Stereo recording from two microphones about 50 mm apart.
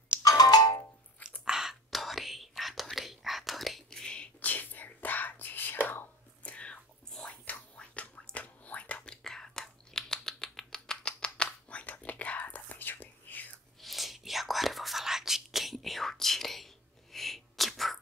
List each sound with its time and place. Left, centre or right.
1.4 s whispering: centre
3.9 s whispering: centre
4.4 s whispering: left
6.5 s whispering: left
7.2 s a sound: left
13.7 s whispering: centre